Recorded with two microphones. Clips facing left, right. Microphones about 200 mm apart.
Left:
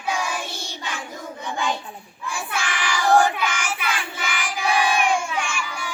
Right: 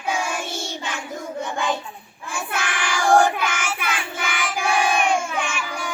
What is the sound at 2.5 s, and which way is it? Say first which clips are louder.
Child singing: right 1 dB; 50° right (ahead or behind).